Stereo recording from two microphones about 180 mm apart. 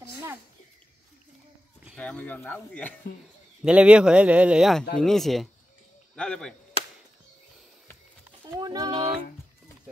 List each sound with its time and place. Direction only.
2.0 s speech: 10° left (ahead or behind)
3.6 s a man's voice: 5° right (ahead or behind)
8.5 s a sound: 20° right (ahead or behind)